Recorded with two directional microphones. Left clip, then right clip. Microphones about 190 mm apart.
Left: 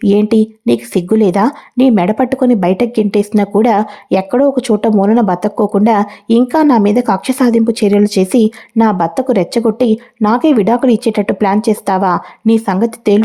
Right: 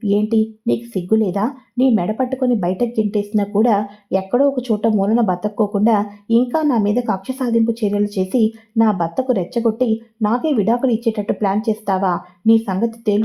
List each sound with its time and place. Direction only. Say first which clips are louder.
0.0 s speech: left 7 dB; 35° left (ahead or behind)